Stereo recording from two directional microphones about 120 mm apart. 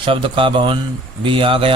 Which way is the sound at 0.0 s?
45° right (ahead or behind).